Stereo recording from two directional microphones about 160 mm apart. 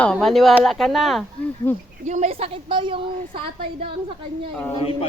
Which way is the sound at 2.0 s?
45° right (ahead or behind).